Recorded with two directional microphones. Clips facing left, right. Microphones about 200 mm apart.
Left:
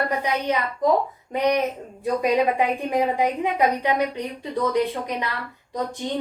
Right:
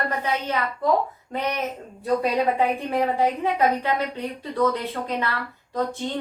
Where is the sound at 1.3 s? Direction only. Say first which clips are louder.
Left 7 dB; 15° left (ahead or behind).